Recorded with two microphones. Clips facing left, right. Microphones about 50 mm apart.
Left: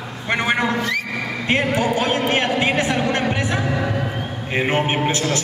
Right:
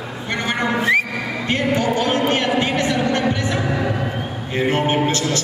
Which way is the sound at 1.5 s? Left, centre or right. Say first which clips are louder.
Even; centre.